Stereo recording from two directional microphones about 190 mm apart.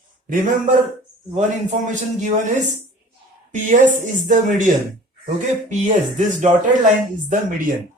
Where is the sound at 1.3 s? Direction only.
40° right (ahead or behind).